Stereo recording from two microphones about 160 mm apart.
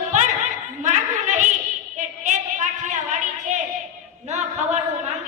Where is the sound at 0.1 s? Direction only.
50° right (ahead or behind).